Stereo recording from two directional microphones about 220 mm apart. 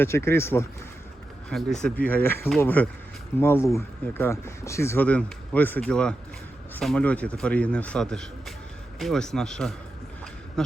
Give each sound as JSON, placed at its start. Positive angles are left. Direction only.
{"t": 0.0, "sound": "a man's voice", "side_deg": 10}